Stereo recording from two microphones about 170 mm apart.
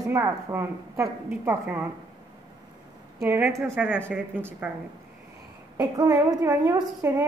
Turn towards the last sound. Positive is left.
turn(degrees=-20)  # may be behind; listen again after turning